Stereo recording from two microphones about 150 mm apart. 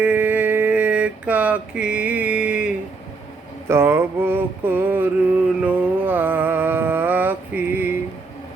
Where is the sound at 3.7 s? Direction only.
15° right (ahead or behind).